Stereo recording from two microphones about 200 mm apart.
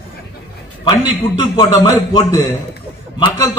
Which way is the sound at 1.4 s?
15° left (ahead or behind).